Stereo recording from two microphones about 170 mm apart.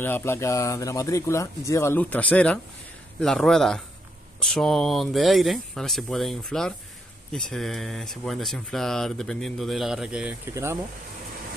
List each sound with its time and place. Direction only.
0.0 s speech: 15° left (ahead or behind); by 10.3 s 5° right (ahead or behind)
10.4 s speech: 15° right (ahead or behind)